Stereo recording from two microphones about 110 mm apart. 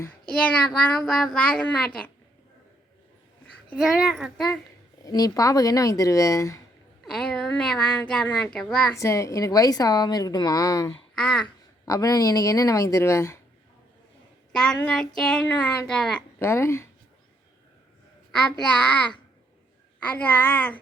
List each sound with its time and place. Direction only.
0.3 s speech: 10° left (ahead or behind)
3.8 s a child's voice: 5° right (ahead or behind)
5.0 s a woman's voice: 30° left (ahead or behind)
7.0 s speech: 10° left (ahead or behind)
8.9 s a woman's voice: 25° left (ahead or behind)
11.1 s speech: 5° left (ahead or behind)
11.9 s a woman's voice: 30° left (ahead or behind)
14.5 s speech: 10° left (ahead or behind)
16.4 s a woman's voice: 20° left (ahead or behind)
20.0 s speech: 15° left (ahead or behind)